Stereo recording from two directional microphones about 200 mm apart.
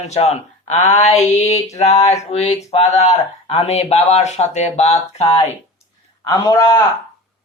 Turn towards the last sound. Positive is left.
turn(degrees=15)  # may be behind; listen again after turning